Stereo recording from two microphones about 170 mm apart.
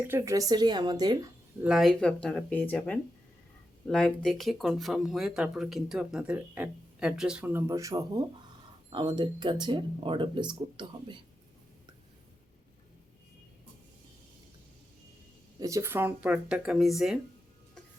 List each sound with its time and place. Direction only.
0.0 s speech: 15° right (ahead or behind)
1.6 s speech: centre (ahead or behind); by 11.2 s 25° right (ahead or behind)
15.6 s speech: 15° right (ahead or behind)